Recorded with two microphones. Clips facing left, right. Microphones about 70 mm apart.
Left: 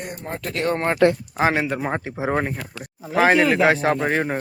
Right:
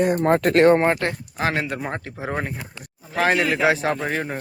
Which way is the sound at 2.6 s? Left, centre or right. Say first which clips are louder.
Left 3 dB; right.